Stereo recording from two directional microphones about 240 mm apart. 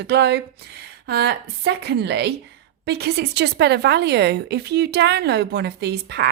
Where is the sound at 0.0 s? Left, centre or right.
Right.